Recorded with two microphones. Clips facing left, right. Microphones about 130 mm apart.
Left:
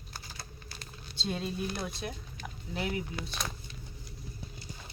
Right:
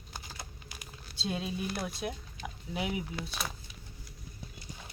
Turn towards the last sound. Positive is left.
turn(degrees=-5)  # may be behind; listen again after turning